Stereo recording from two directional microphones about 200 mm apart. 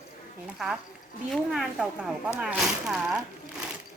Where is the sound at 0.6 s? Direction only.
Centre (ahead or behind).